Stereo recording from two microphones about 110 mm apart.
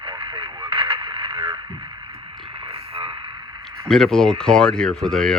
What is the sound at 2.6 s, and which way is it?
Radio, 60° right (ahead or behind).